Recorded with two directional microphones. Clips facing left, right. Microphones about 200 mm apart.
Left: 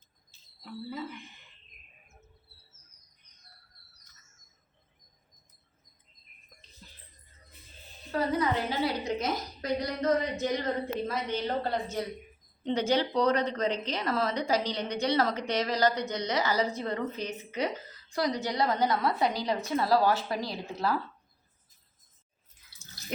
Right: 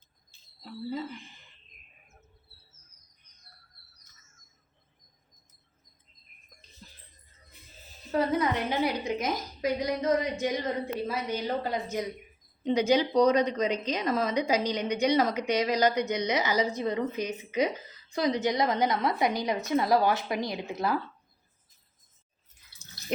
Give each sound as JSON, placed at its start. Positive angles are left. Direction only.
{"t": 0.6, "sound": "speech", "side_deg": -30}
{"t": 7.8, "sound": "music", "side_deg": 0}
{"t": 8.1, "sound": "a woman's voice", "side_deg": -20}